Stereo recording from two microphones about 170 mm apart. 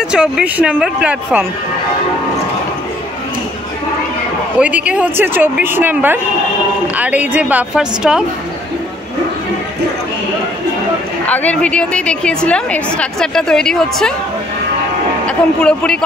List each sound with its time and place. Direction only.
0.1 s speech: 5° right (ahead or behind)
4.6 s speech: 10° right (ahead or behind)
11.2 s a woman's voice: 10° left (ahead or behind)
15.2 s a woman's voice: 5° left (ahead or behind)